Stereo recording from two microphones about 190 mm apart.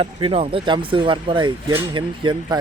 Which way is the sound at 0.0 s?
30° right (ahead or behind).